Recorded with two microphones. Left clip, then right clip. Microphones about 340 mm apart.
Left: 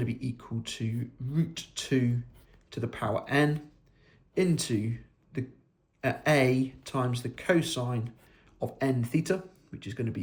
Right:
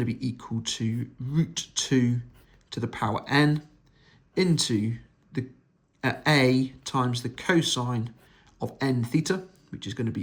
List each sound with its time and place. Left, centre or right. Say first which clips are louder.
0.0 s speech: right 4 dB; centre